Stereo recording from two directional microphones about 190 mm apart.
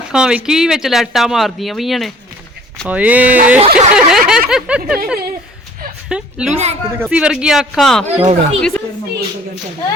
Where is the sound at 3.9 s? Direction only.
5° right (ahead or behind).